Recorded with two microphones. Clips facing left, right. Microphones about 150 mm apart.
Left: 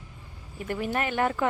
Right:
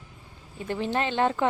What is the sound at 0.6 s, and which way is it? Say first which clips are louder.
Speech: right 1 dB; 25° right (ahead or behind).